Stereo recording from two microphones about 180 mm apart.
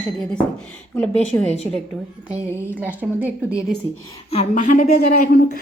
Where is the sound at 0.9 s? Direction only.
5° left (ahead or behind).